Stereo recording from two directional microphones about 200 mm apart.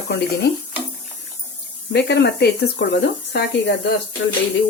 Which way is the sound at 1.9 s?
60° left (ahead or behind).